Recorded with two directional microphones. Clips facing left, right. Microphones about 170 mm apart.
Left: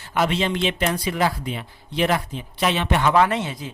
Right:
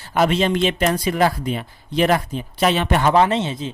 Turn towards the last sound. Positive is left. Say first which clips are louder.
# right 3 dB
turn(degrees=-25)  # may be behind; listen again after turning